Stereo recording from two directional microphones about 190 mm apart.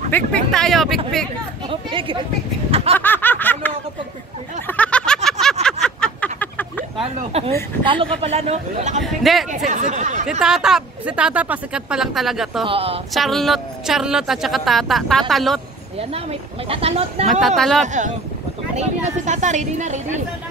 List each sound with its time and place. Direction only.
0.1 s speech: 5° left (ahead or behind)
1.7 s speech: 25° right (ahead or behind)
2.7 s snicker: 30° right (ahead or behind)
3.0 s snicker: 10° left (ahead or behind)
4.6 s a sound: 5° left (ahead or behind)
7.0 s a woman's voice: 30° right (ahead or behind)
9.0 s speech: centre (ahead or behind)
9.5 s a woman's voice: 40° right (ahead or behind)
10.4 s speech: 5° right (ahead or behind)
12.6 s a woman's voice: 30° right (ahead or behind)
13.1 s speech: centre (ahead or behind)
16.0 s a woman's voice: 30° right (ahead or behind)
17.6 s speech: centre (ahead or behind)
17.8 s a woman's voice: 40° right (ahead or behind)